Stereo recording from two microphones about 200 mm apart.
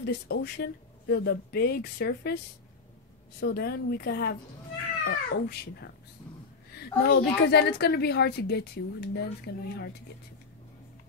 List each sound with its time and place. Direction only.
0.0 s speech: 55° left (ahead or behind)
3.3 s a woman's voice: 55° left (ahead or behind)